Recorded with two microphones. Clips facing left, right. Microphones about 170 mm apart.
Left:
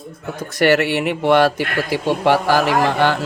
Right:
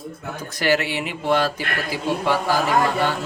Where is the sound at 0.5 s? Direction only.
65° left (ahead or behind).